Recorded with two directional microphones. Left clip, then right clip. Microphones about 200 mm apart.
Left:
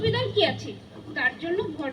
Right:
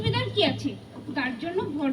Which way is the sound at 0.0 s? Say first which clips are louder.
Left 2 dB; 30° right (ahead or behind).